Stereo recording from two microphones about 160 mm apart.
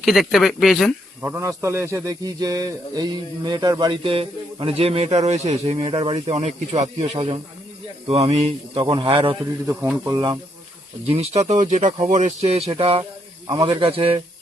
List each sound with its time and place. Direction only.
0.0 s speech: centre (ahead or behind)
1.2 s speech: 15° right (ahead or behind); by 9.4 s 35° right (ahead or behind)
9.6 s speech: 15° right (ahead or behind)
11.0 s speech: 40° right (ahead or behind)